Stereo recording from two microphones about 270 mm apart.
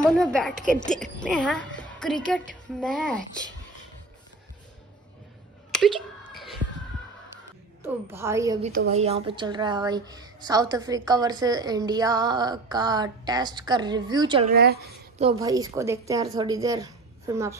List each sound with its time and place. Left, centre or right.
0.1 s a woman's voice: centre
5.7 s a sound: centre
7.8 s a woman's voice: centre
8.6 s a woman's voice: right
14.5 s speech: right
15.3 s a woman's voice: centre